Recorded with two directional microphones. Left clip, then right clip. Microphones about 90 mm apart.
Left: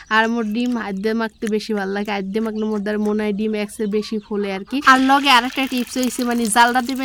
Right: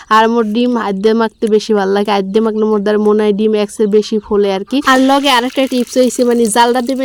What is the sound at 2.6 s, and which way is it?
Speech, 20° right (ahead or behind).